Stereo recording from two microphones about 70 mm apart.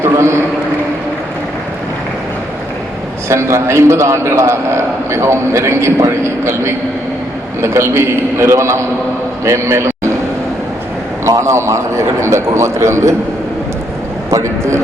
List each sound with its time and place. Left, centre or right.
0.0 s a sound: right
3.2 s a man's voice: right
7.6 s a man's voice: right
11.3 s a man's voice: right
14.3 s a man's voice: right